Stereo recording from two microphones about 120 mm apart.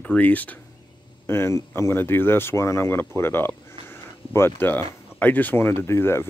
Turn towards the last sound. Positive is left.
turn(degrees=20)  # may be behind; listen again after turning